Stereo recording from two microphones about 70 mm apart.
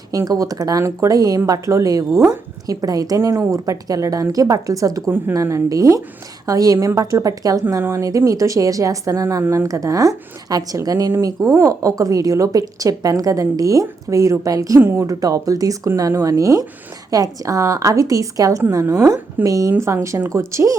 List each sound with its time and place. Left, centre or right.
0.3 s a woman's voice: right
0.8 s a woman's voice: right
7.8 s speech: right
8.0 s a woman's voice: right
14.8 s speech: right
15.0 s a woman's voice: right
19.8 s a woman's voice: right